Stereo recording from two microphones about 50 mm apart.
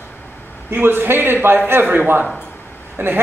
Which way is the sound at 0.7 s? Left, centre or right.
Right.